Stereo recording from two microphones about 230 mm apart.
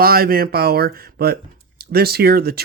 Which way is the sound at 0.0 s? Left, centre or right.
Right.